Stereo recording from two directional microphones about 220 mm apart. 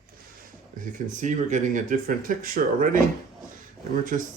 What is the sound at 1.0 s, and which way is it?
Speech, 35° right (ahead or behind).